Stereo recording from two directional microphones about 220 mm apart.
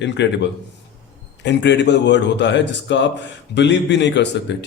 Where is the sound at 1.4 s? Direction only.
50° left (ahead or behind).